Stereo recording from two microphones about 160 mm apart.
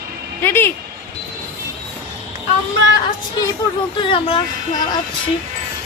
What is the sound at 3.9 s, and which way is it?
Speech, 35° left (ahead or behind).